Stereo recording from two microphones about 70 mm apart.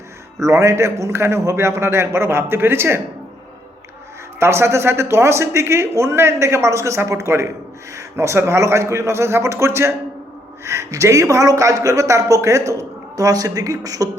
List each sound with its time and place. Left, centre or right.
0.3 s speech: right
4.4 s speech: right